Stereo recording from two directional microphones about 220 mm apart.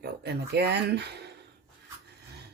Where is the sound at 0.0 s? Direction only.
50° right (ahead or behind).